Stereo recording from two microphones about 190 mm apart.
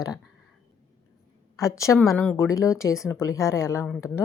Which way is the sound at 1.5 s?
15° left (ahead or behind).